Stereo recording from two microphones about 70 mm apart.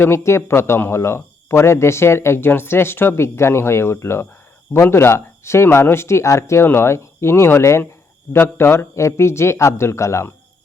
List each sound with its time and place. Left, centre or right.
0.0 s speech: left